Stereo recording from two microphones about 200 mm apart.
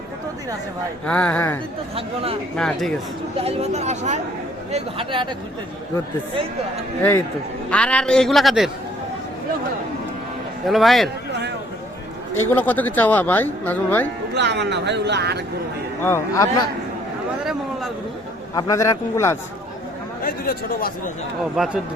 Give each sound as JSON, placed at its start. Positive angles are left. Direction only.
{"t": 1.0, "sound": "speech", "side_deg": 5}
{"t": 2.6, "sound": "a man's voice", "side_deg": 5}
{"t": 3.3, "sound": "speech", "side_deg": -30}
{"t": 7.7, "sound": "a man's voice", "side_deg": 5}
{"t": 10.7, "sound": "a man's voice", "side_deg": 0}
{"t": 11.3, "sound": "speech", "side_deg": -60}
{"t": 12.5, "sound": "speech", "side_deg": 10}
{"t": 14.3, "sound": "speech", "side_deg": -60}
{"t": 16.0, "sound": "speech", "side_deg": 15}
{"t": 18.5, "sound": "speech", "side_deg": 15}
{"t": 20.2, "sound": "speech", "side_deg": 45}
{"t": 21.5, "sound": "a man's voice", "side_deg": 0}